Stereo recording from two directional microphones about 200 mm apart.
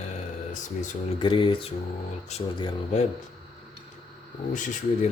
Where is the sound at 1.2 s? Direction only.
25° left (ahead or behind).